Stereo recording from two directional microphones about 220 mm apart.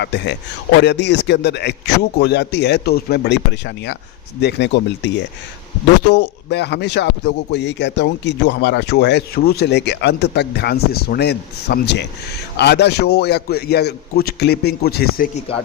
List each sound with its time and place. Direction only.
0.0 s speech: 50° left (ahead or behind)
6.5 s speech: 50° left (ahead or behind)